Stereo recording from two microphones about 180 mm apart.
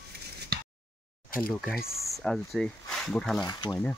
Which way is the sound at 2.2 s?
Centre (ahead or behind).